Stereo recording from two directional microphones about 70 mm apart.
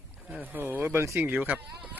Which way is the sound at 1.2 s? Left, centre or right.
Right.